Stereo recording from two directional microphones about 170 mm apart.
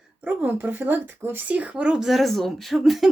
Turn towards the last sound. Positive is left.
turn(degrees=0)  # may be behind; listen again after turning